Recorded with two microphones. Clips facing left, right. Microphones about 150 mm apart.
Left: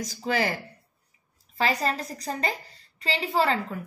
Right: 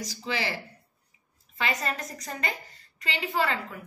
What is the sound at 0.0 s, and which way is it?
Speech, 50° left (ahead or behind).